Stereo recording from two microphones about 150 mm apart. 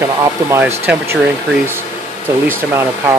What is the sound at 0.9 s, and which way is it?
Speech, 10° right (ahead or behind).